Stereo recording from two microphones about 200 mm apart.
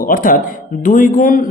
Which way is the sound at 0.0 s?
45° left (ahead or behind).